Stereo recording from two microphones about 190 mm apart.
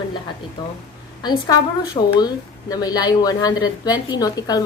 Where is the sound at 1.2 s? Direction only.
20° left (ahead or behind).